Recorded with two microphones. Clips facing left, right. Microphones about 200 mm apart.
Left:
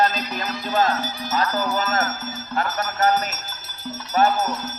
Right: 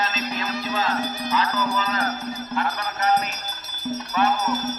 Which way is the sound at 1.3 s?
45° left (ahead or behind).